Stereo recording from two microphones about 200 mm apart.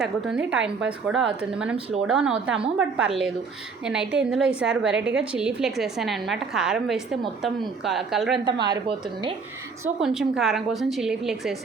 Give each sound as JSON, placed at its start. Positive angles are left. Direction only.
{"t": 0.0, "sound": "a woman's voice", "side_deg": -5}
{"t": 8.4, "sound": "a woman's voice", "side_deg": -20}
{"t": 10.0, "sound": "a woman's voice", "side_deg": -5}